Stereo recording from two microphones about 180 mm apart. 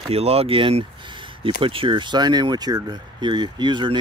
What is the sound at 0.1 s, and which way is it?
Speech, 35° right (ahead or behind).